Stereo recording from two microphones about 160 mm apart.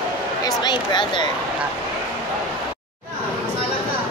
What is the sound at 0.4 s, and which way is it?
Speech, 25° left (ahead or behind).